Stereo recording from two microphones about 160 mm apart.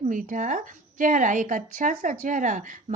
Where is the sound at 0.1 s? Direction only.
55° right (ahead or behind).